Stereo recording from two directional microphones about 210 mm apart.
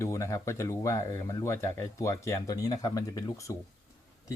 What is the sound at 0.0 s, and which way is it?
Speech, 15° left (ahead or behind).